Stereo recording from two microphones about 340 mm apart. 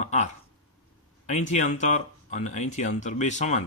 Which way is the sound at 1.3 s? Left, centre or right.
Left.